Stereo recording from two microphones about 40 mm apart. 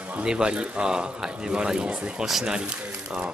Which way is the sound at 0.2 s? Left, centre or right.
Right.